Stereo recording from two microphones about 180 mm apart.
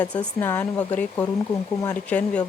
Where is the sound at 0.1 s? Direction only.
10° left (ahead or behind).